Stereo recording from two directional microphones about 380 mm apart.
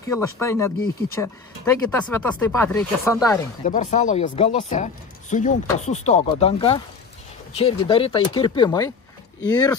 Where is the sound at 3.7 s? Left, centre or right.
Centre.